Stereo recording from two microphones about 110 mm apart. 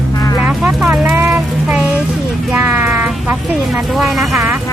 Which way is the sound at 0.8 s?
5° right (ahead or behind).